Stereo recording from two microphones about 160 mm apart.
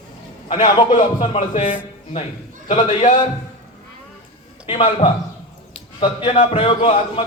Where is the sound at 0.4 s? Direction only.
35° left (ahead or behind).